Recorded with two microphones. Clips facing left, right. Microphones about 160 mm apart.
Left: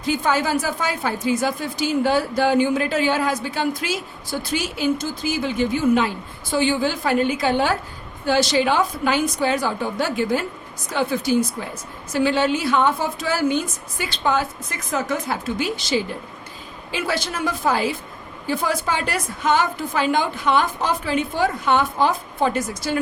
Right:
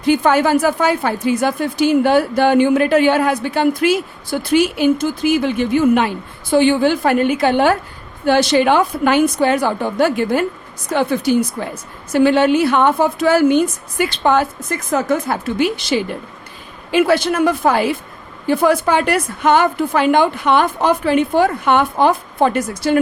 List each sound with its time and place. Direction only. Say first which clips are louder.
0.0 s a woman's voice: right 7 dB; 60° right (ahead or behind)